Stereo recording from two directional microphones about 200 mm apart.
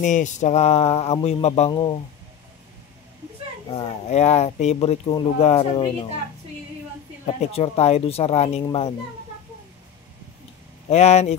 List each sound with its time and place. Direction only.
0.0 s speech: 40° left (ahead or behind)
3.7 s speech: 30° left (ahead or behind)
7.2 s speech: 30° left (ahead or behind)
10.9 s speech: 35° left (ahead or behind)